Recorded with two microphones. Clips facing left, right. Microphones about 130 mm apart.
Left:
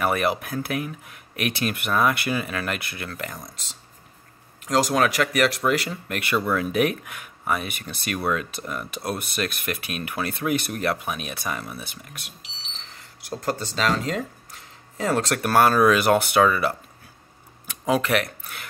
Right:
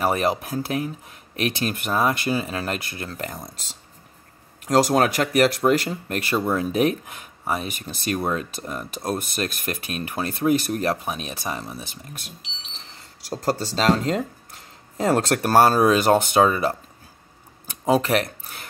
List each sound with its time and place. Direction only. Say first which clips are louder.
0.0 s speech: right 1 dB; 30° right (ahead or behind)
4.6 s speech: right 3 dB; 45° right (ahead or behind)